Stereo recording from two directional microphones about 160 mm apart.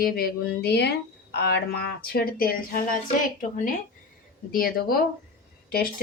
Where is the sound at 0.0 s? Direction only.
70° left (ahead or behind).